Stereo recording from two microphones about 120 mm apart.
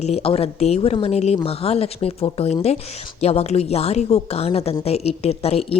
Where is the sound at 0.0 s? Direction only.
55° left (ahead or behind).